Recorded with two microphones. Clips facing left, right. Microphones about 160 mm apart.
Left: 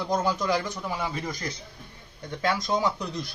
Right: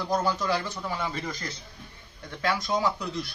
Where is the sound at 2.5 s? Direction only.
20° left (ahead or behind).